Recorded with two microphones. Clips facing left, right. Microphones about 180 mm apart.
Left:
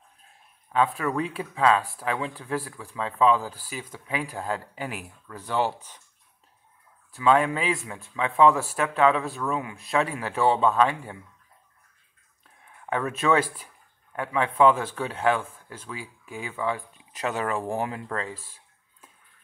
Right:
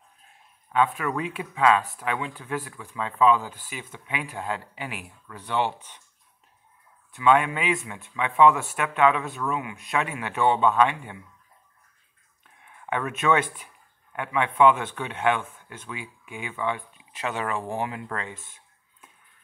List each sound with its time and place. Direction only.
0.7 s speech: 35° left (ahead or behind)
7.1 s speech: 35° left (ahead or behind)
12.6 s speech: 35° left (ahead or behind)